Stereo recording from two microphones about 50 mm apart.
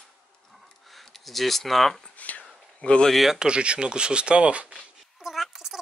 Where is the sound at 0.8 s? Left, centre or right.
Centre.